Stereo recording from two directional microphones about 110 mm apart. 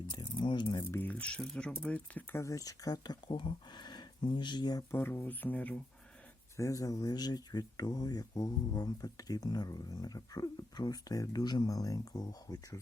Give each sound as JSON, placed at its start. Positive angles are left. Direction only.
{"t": 0.1, "sound": "a sound", "side_deg": 40}
{"t": 1.0, "sound": "speech", "side_deg": 10}
{"t": 2.4, "sound": "speech", "side_deg": 30}
{"t": 4.9, "sound": "speech", "side_deg": 20}
{"t": 6.6, "sound": "speech", "side_deg": 30}